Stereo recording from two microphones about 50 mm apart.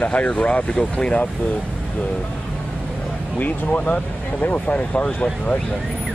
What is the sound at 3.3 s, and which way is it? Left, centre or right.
Speech, left.